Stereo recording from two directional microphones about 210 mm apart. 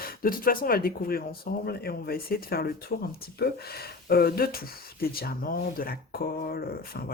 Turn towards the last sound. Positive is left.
turn(degrees=45)  # may be behind; listen again after turning